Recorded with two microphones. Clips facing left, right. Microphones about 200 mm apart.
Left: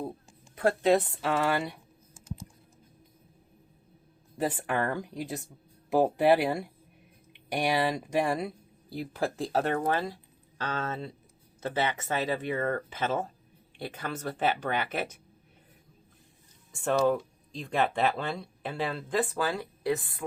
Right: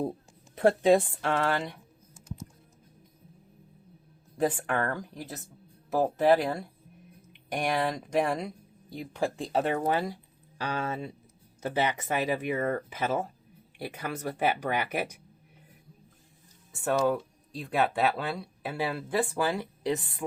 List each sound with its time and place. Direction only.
0.5 s a woman's voice: 25° right (ahead or behind)
0.9 s speech: 10° right (ahead or behind)
1.2 s speech: 5° left (ahead or behind)
4.4 s speech: 10° left (ahead or behind)
9.7 s speech: 15° right (ahead or behind)
16.8 s speech: 5° right (ahead or behind)